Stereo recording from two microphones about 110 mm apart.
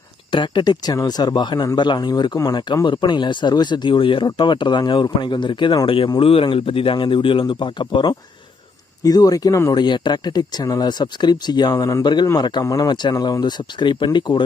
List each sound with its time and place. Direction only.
0.3 s speech: 45° left (ahead or behind)
9.0 s speech: 35° left (ahead or behind)
12.0 s speech: 45° left (ahead or behind)